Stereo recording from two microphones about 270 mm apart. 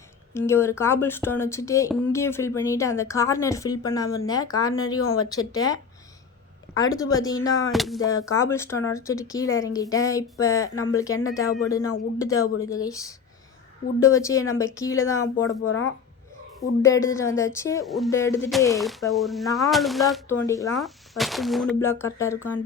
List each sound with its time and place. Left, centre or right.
0.3 s speech: centre
7.7 s speech: centre
8.3 s speech: centre
15.4 s speech: left
16.6 s speech: centre
17.8 s speech: centre
18.1 s speech: centre
18.7 s speech: centre
20.4 s speech: centre
20.7 s speech: centre